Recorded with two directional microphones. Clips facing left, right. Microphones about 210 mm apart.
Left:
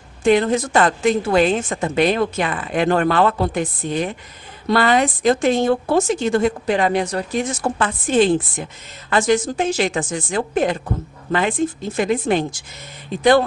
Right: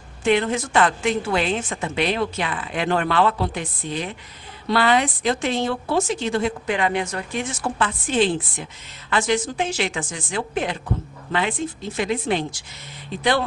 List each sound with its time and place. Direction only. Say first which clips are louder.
0.2 s a woman's voice: left 4 dB; 40° left (ahead or behind)